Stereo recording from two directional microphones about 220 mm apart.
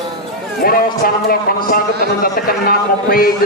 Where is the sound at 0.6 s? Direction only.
45° left (ahead or behind).